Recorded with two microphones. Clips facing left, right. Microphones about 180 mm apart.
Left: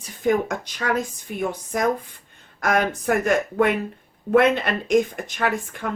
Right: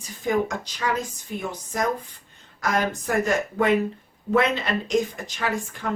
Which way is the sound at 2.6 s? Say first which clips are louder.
Left 3 dB; 55° left (ahead or behind).